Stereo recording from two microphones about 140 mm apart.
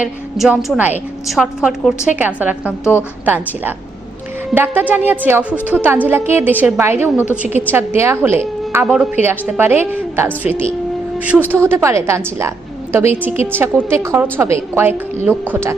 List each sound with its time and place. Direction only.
0.0 s a woman's voice: 5° right (ahead or behind)